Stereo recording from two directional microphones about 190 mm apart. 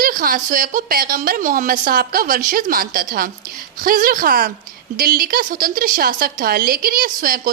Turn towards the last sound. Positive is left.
turn(degrees=-50)  # may be behind; listen again after turning